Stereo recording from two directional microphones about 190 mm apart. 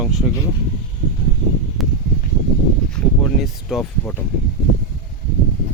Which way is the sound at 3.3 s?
Centre (ahead or behind).